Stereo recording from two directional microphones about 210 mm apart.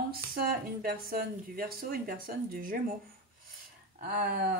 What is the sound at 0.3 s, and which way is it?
Speech, 45° right (ahead or behind).